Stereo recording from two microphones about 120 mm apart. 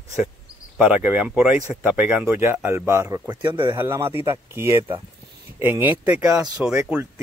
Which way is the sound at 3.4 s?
45° right (ahead or behind).